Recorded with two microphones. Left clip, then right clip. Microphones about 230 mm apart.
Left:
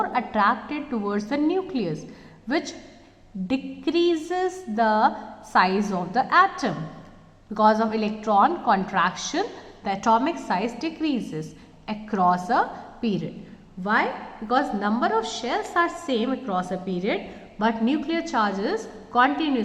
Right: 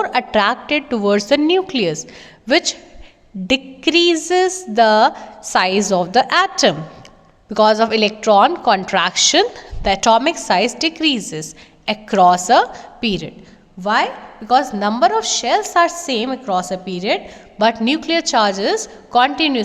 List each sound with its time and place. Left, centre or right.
0.0 s a woman's voice: right